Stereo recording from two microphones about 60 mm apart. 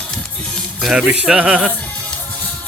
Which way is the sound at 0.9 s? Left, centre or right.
Centre.